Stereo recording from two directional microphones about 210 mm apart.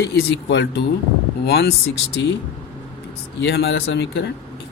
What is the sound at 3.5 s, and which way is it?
Speech, 60° left (ahead or behind).